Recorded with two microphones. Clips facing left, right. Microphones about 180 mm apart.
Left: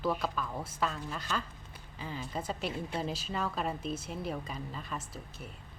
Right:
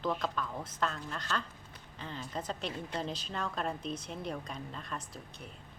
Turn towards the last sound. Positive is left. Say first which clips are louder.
# left 1 dB
turn(degrees=5)  # may be behind; listen again after turning